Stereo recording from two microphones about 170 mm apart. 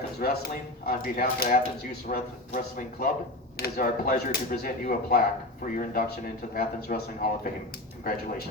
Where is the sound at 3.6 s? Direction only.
65° left (ahead or behind).